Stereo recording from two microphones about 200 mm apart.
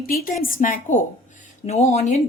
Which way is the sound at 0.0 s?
45° left (ahead or behind).